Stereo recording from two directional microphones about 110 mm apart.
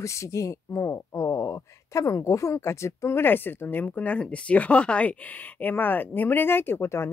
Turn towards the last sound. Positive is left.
turn(degrees=25)  # may be behind; listen again after turning